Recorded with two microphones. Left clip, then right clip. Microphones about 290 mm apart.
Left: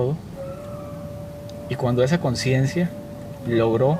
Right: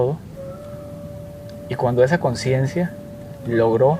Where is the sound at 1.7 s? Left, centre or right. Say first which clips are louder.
Right 4 dB; right.